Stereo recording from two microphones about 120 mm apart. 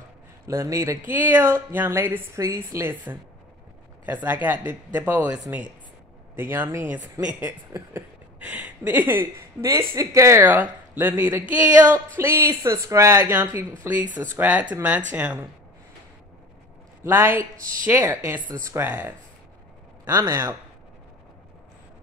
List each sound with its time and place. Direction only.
0.5 s a woman's voice: 25° right (ahead or behind)
4.0 s speech: 15° right (ahead or behind)
6.3 s a woman's voice: 15° right (ahead or behind)
17.0 s a woman's voice: 20° right (ahead or behind)
20.1 s speech: 30° right (ahead or behind)